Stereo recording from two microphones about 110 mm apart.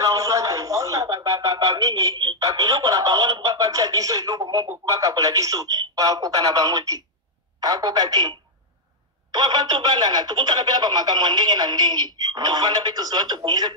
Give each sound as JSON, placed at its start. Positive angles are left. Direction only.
{"t": 0.0, "sound": "radio", "side_deg": -30}
{"t": 4.6, "sound": "speech", "side_deg": -30}